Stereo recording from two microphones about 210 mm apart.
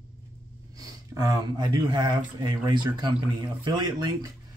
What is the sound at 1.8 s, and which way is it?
Speech, 20° right (ahead or behind).